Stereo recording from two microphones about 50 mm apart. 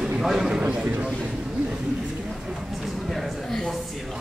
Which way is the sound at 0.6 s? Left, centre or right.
Right.